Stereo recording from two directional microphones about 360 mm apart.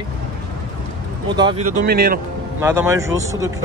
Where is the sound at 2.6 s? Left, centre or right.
Centre.